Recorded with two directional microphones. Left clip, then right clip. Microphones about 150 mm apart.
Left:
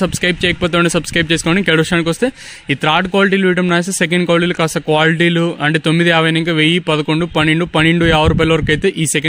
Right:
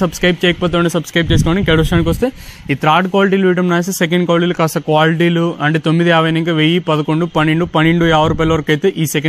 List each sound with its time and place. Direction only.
0.0 s speech: 35° left (ahead or behind)